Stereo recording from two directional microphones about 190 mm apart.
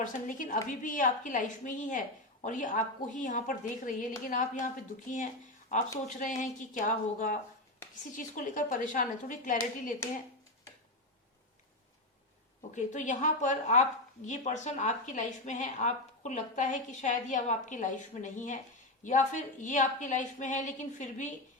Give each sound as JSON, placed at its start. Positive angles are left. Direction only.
{"t": 0.0, "sound": "a woman's voice", "side_deg": 45}
{"t": 12.7, "sound": "a woman's voice", "side_deg": 40}